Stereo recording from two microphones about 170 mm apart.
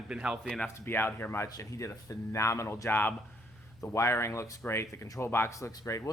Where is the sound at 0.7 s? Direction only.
15° left (ahead or behind).